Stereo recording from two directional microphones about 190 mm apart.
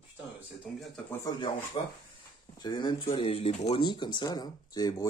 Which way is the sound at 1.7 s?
30° left (ahead or behind).